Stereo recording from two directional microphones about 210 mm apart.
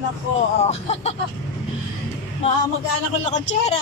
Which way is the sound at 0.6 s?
30° left (ahead or behind).